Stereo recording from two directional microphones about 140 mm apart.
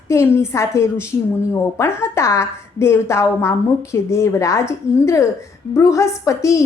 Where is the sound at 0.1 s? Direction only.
20° left (ahead or behind).